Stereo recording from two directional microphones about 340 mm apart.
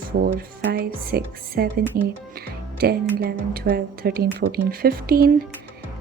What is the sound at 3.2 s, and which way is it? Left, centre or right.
Music, right.